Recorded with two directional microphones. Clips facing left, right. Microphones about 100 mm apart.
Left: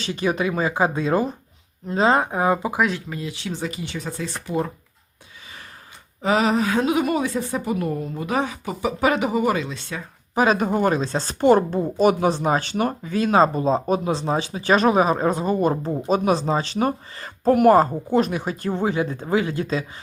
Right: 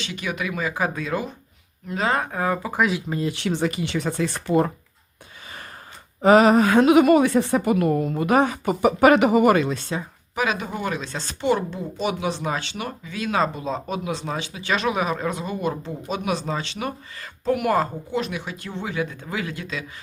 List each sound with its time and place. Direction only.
0.0 s speech: 35° left (ahead or behind); by 2.7 s 20° left (ahead or behind)
2.7 s speech: centre (ahead or behind)
3.2 s speech: 65° right (ahead or behind)
4.4 s a woman's voice: 60° right (ahead or behind)
6.2 s a woman's voice: 50° right (ahead or behind)
10.3 s speech: 40° left (ahead or behind)